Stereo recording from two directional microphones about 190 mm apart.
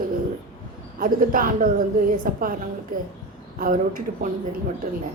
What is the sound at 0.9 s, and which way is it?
A man's voice, 45° right (ahead or behind).